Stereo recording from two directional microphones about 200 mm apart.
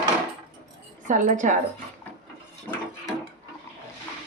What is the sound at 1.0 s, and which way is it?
Speech, 40° right (ahead or behind).